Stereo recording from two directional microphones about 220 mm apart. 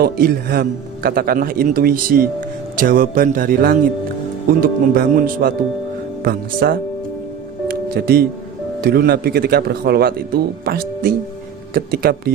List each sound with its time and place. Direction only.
0.0 s a man's voice: 45° right (ahead or behind)
7.7 s music: 45° right (ahead or behind)
8.8 s speech: 45° right (ahead or behind)